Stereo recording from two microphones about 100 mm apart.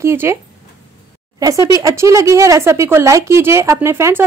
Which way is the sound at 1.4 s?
35° right (ahead or behind).